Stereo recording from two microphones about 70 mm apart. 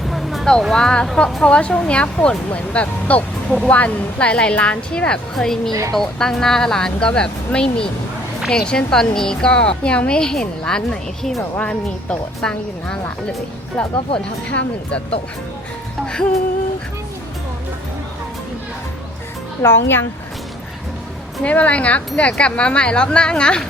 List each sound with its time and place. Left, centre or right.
0.1 s vehicle: centre
0.7 s speech: centre
11.6 s speech: centre
16.0 s speech: centre
19.6 s speech: left
21.4 s speech: centre